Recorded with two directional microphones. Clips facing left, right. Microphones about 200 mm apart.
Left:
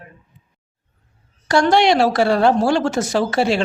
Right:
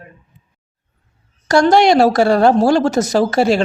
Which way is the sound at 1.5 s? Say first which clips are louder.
Right 4 dB; 40° right (ahead or behind).